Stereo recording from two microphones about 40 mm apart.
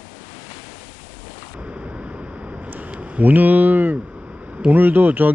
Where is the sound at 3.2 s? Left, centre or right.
Right.